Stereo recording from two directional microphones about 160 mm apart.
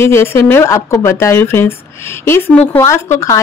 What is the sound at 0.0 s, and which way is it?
A woman's voice, 15° left (ahead or behind).